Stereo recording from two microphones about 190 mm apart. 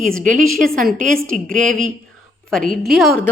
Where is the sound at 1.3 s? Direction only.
5° left (ahead or behind).